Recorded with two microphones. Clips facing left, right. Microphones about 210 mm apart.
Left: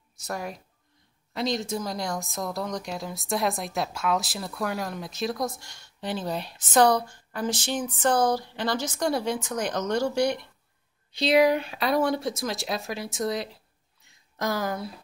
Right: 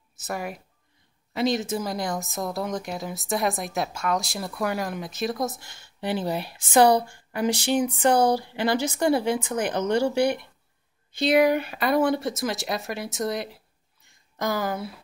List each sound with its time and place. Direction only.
0.1 s speech: 5° right (ahead or behind)
10.1 s speech: 55° right (ahead or behind)
11.1 s speech: centre (ahead or behind)
14.0 s a sound: centre (ahead or behind)